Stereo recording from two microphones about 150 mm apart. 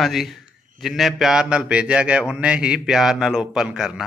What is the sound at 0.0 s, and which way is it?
Speech, centre (ahead or behind).